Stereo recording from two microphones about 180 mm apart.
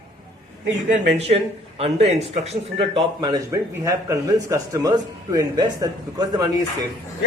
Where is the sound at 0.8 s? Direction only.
40° right (ahead or behind); by 5.9 s 20° right (ahead or behind).